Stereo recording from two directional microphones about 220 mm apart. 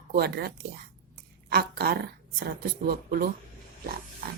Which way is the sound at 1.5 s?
45° right (ahead or behind).